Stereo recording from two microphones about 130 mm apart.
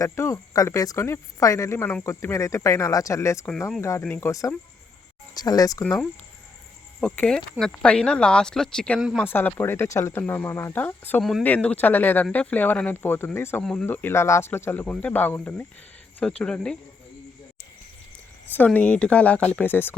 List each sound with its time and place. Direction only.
0.0 s speech: 25° left (ahead or behind)
7.0 s speech: 10° left (ahead or behind)
9.2 s speech: 15° left (ahead or behind)
11.2 s speech: centre (ahead or behind); by 13.6 s 20° left (ahead or behind)
13.6 s speech: 5° left (ahead or behind)
13.8 s speech: 15° left (ahead or behind)
18.5 s speech: 10° left (ahead or behind)